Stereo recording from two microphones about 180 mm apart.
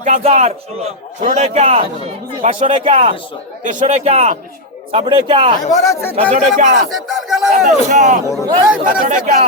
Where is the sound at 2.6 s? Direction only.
30° right (ahead or behind).